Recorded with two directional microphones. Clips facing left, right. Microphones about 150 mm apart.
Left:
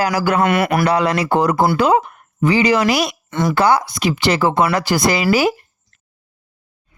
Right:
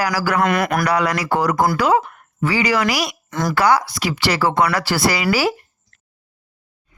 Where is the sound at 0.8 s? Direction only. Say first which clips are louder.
Left 3 dB; 25° left (ahead or behind).